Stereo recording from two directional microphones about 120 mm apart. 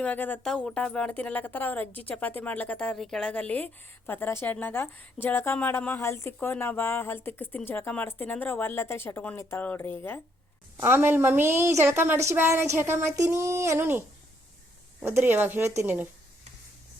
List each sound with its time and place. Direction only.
0.0 s a woman's voice: 15° left (ahead or behind)
10.8 s a woman's voice: 20° right (ahead or behind)
15.0 s speech: 20° right (ahead or behind)